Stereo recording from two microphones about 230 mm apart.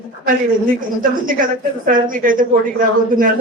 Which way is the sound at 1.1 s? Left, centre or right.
Right.